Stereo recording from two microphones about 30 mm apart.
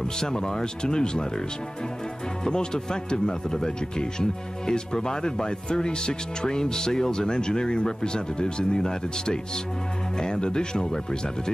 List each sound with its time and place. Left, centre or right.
0.0 s speech: left
2.4 s speech: left